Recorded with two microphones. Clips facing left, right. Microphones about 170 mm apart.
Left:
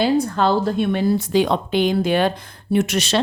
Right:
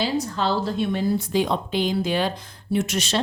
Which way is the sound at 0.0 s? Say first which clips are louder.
Left 6 dB; 55° left (ahead or behind).